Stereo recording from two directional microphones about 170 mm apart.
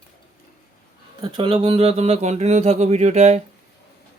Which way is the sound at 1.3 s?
30° right (ahead or behind).